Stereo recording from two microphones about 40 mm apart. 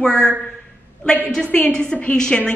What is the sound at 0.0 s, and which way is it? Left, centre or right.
Speech, centre.